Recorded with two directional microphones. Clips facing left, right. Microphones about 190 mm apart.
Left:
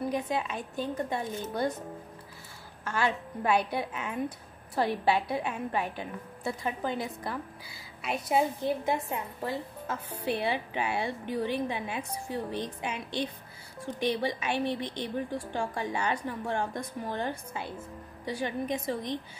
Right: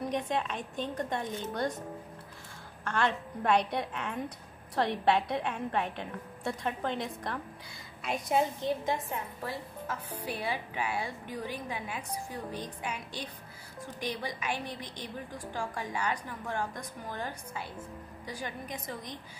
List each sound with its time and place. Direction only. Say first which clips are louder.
0.1 s a woman's voice: left 1 dB; 5° left (ahead or behind)
2.8 s a woman's voice: left 1 dB; 5° left (ahead or behind)
9.4 s a woman's voice: left 4 dB; 25° left (ahead or behind)